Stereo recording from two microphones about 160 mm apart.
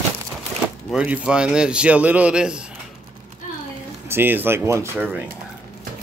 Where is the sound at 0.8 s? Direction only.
5° right (ahead or behind).